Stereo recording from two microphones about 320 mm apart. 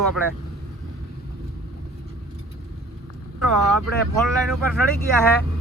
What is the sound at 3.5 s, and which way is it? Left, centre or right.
Speech, right.